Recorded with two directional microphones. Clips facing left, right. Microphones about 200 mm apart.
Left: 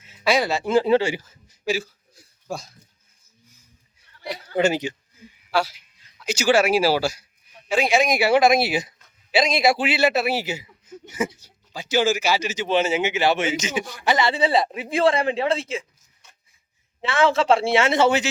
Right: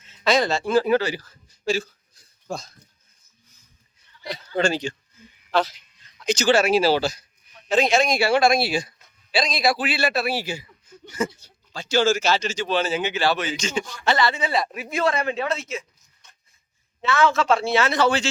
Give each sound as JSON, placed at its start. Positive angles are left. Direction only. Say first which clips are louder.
{"t": 0.0, "sound": "speech", "louder": "even", "side_deg": 10}
{"t": 4.5, "sound": "a man's voice", "louder": "left 2 dB", "side_deg": 20}
{"t": 14.3, "sound": "a man's voice", "louder": "left 4 dB", "side_deg": 30}
{"t": 17.0, "sound": "a man's voice", "louder": "left 1 dB", "side_deg": 30}